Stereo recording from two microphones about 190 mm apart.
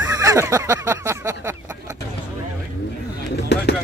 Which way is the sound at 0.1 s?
15° right (ahead or behind).